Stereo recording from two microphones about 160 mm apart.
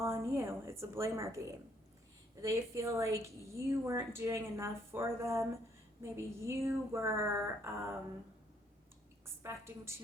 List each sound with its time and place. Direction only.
0.0 s a woman's voice: 15° right (ahead or behind)
9.2 s a woman's voice: 15° right (ahead or behind)